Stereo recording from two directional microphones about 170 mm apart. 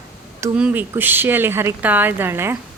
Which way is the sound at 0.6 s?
10° right (ahead or behind).